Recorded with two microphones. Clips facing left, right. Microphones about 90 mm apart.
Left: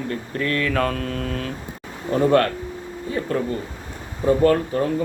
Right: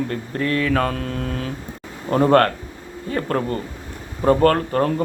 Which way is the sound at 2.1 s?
45° right (ahead or behind).